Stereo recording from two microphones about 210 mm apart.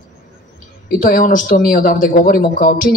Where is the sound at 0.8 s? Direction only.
40° left (ahead or behind).